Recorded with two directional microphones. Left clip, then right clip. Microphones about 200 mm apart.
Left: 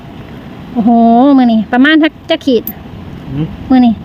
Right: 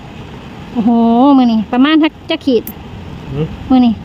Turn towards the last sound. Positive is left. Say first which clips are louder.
# left 2 dB
turn(degrees=5)  # may be behind; listen again after turning